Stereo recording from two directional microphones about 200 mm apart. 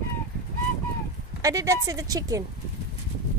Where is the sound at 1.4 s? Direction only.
15° right (ahead or behind).